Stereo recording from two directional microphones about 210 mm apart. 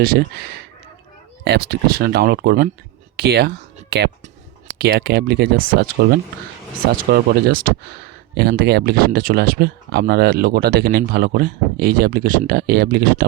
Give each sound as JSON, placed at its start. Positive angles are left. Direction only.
{"t": 1.5, "sound": "speech", "side_deg": -50}